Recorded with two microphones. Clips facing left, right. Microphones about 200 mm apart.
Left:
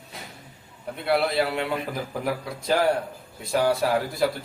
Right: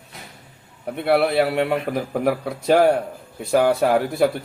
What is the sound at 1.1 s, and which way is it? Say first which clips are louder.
A man's voice: right 5 dB; 60° right (ahead or behind).